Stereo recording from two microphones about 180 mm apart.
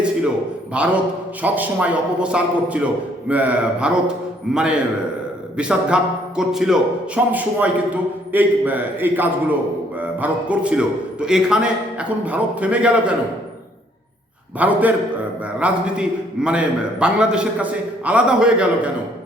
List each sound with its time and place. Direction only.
0.7 s a man's voice: 5° right (ahead or behind)
14.6 s a man's voice: 10° right (ahead or behind)